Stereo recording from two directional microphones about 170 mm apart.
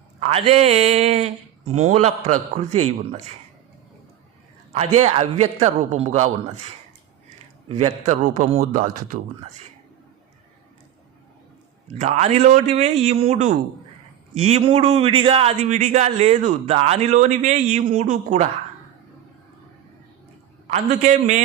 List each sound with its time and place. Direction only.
0.2 s a man's voice: 35° right (ahead or behind)
4.7 s a man's voice: 40° right (ahead or behind)
11.9 s a man's voice: 40° right (ahead or behind)
20.7 s a man's voice: 45° right (ahead or behind)